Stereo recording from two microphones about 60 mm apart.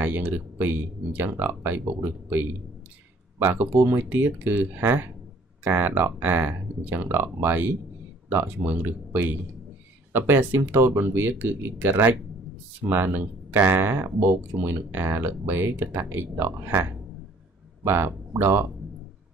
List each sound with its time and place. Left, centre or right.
0.0 s speech: right
3.5 s speech: right
13.6 s speech: right
13.8 s speech: right
17.8 s speech: right